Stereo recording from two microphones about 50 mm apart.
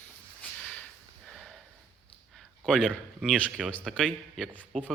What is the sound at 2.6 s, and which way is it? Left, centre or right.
Speech, centre.